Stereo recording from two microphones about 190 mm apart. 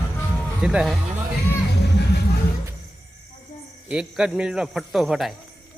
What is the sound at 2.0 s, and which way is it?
Vehicle, 55° left (ahead or behind).